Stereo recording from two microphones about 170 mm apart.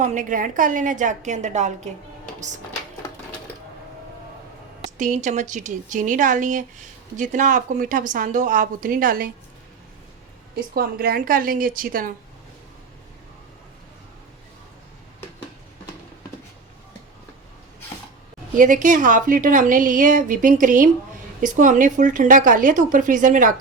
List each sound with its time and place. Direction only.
0.0 s a woman's voice: 45° right (ahead or behind)
4.9 s a woman's voice: 45° right (ahead or behind)
10.5 s a woman's voice: 60° right (ahead or behind)
18.5 s a woman's voice: 50° right (ahead or behind)